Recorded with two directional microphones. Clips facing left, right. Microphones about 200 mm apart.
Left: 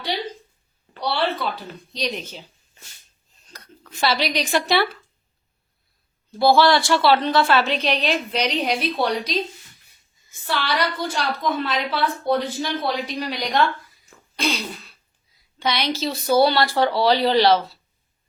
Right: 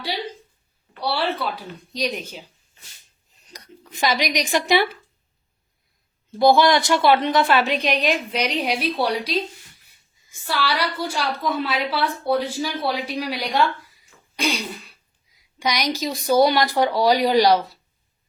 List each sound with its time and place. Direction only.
1.0 s speech: 10° right (ahead or behind)
3.4 s speech: 15° right (ahead or behind)
6.4 s speech: 20° right (ahead or behind)
14.3 s throat clearing: 15° right (ahead or behind)
15.5 s speech: 15° right (ahead or behind)